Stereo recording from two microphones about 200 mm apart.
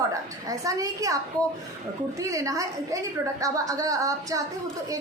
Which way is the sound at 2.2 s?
15° right (ahead or behind).